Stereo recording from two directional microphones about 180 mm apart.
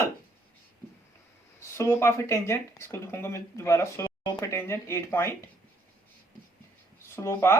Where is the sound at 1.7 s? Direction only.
15° left (ahead or behind).